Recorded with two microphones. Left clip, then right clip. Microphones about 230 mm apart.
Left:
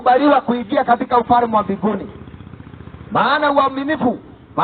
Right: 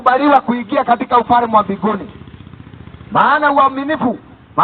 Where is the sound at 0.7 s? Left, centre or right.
Centre.